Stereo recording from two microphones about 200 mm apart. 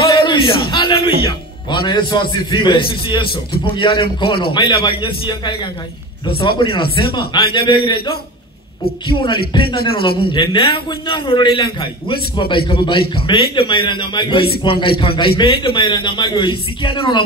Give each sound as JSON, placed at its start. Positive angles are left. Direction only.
{"t": 0.0, "sound": "a sound", "side_deg": 25}
{"t": 1.2, "sound": "music", "side_deg": 25}
{"t": 2.3, "sound": "a man's voice", "side_deg": 25}